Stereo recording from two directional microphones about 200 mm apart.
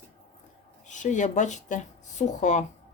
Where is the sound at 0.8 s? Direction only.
40° left (ahead or behind).